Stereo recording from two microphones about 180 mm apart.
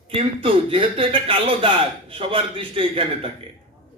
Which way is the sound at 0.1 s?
30° right (ahead or behind).